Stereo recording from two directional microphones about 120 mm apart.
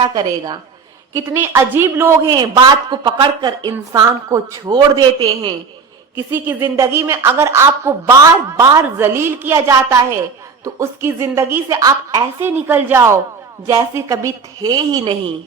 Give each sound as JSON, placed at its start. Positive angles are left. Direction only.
{"t": 0.0, "sound": "a woman's voice", "side_deg": -35}
{"t": 1.1, "sound": "a woman's voice", "side_deg": -20}
{"t": 2.3, "sound": "a woman's voice", "side_deg": -40}
{"t": 6.1, "sound": "a woman's voice", "side_deg": -20}
{"t": 8.8, "sound": "a woman's voice", "side_deg": -20}